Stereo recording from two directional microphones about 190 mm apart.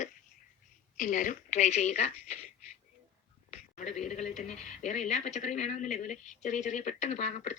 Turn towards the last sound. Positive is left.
turn(degrees=40)  # may be behind; listen again after turning